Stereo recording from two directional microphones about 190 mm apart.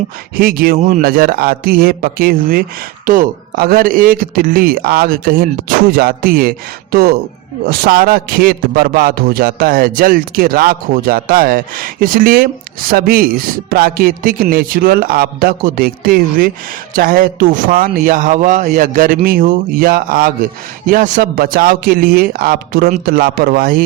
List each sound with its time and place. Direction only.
0.3 s a man's voice: 50° right (ahead or behind)